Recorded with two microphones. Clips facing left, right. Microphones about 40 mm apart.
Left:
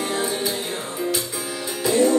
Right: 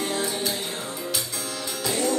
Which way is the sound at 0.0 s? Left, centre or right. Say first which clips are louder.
Left 3 dB; centre.